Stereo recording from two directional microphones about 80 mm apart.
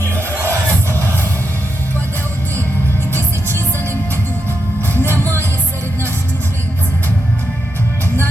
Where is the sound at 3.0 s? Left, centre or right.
Right.